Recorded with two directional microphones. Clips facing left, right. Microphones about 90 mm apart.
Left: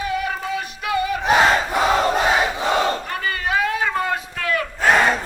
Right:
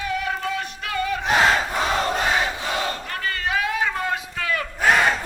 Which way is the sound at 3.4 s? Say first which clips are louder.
Left 2 dB; centre (ahead or behind).